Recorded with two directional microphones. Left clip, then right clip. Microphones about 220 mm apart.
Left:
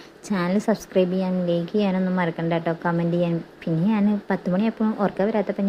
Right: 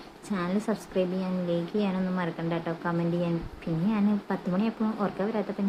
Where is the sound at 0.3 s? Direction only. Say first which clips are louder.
Left 7 dB; 25° left (ahead or behind).